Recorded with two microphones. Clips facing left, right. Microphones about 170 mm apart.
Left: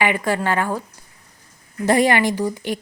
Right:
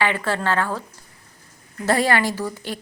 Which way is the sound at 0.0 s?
15° left (ahead or behind).